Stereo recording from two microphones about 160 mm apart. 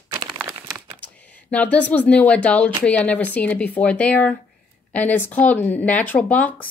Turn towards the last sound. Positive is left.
turn(degrees=10)  # may be behind; listen again after turning